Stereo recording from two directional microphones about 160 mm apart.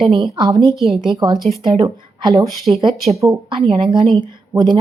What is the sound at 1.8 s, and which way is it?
A woman's voice, 20° right (ahead or behind).